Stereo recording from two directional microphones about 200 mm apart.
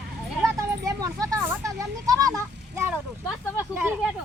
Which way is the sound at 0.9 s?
15° right (ahead or behind).